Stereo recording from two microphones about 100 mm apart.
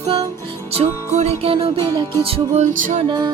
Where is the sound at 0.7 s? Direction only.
90° right.